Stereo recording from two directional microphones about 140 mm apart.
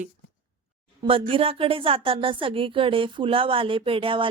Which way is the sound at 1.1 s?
40° right (ahead or behind).